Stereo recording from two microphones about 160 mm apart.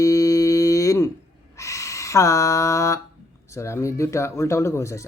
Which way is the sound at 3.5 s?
15° left (ahead or behind).